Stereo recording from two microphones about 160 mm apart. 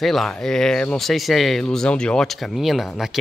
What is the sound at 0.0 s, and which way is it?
Speech, centre (ahead or behind).